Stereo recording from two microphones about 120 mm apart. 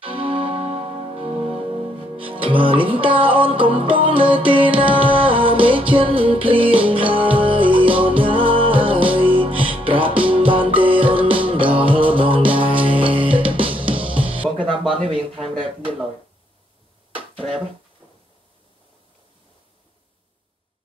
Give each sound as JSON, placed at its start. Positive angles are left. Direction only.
{"t": 0.0, "sound": "music", "side_deg": -50}